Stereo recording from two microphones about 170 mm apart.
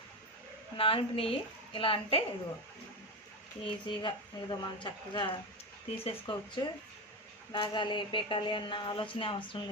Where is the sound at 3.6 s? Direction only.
30° left (ahead or behind).